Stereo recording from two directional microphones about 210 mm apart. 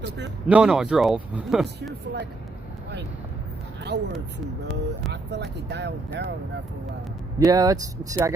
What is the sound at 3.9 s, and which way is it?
Speech, 55° right (ahead or behind).